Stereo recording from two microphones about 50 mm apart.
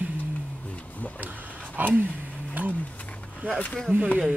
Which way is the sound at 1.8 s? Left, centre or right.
Right.